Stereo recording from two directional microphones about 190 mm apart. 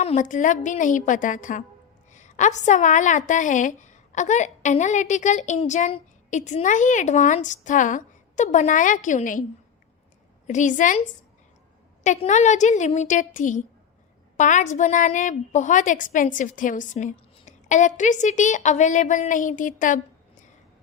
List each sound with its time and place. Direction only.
0.0 s a woman's voice: 40° left (ahead or behind)
10.4 s a woman's voice: 40° left (ahead or behind)